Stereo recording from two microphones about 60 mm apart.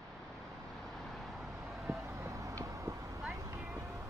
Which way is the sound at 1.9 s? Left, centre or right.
Right.